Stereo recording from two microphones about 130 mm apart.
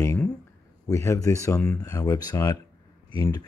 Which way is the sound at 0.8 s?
25° left (ahead or behind).